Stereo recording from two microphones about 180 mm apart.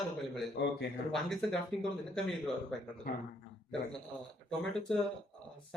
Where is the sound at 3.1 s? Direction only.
55° left (ahead or behind).